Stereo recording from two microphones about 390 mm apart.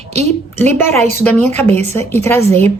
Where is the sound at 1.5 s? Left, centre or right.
Centre.